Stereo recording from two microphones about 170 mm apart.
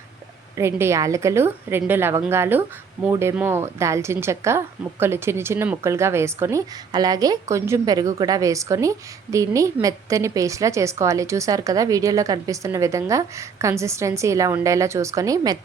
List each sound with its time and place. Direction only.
0.5 s a woman's voice: 15° right (ahead or behind)